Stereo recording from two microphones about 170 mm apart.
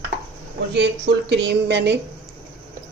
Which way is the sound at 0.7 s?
90° right.